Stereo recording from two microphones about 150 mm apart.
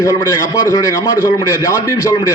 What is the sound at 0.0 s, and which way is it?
A man's voice, 20° left (ahead or behind).